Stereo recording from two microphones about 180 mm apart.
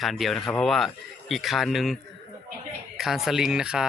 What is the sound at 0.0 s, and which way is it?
Speech, centre (ahead or behind).